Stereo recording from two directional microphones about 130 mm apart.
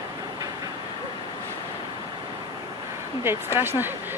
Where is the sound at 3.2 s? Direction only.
20° right (ahead or behind).